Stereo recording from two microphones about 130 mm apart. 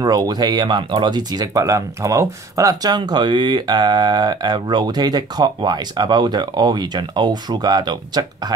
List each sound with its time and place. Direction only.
0.0 s speech: 30° right (ahead or behind)